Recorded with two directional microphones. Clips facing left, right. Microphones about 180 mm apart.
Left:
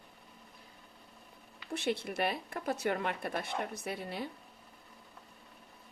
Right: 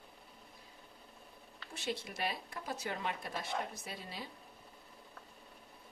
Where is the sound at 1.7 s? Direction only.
60° left (ahead or behind).